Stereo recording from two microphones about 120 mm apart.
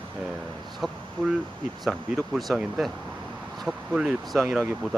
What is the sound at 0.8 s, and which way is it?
Speech, centre (ahead or behind).